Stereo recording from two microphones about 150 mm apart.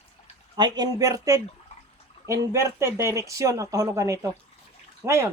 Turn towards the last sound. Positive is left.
turn(degrees=-20)  # may be behind; listen again after turning